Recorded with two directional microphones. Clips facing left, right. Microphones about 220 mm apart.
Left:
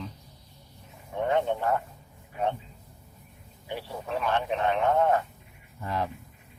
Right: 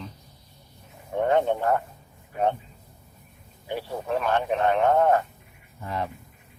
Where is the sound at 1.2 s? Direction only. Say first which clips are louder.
Right 4 dB; 50° right (ahead or behind).